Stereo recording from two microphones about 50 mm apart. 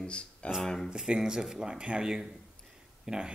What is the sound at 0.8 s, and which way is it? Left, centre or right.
Speech, centre.